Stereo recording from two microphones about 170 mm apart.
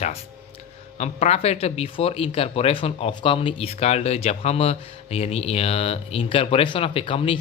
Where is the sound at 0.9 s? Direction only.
40° left (ahead or behind).